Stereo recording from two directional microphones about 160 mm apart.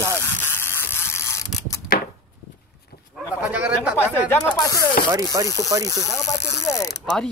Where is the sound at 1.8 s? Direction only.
65° left (ahead or behind).